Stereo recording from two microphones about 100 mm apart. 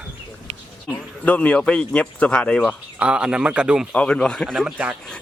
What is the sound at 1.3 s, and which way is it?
Speech, 15° left (ahead or behind).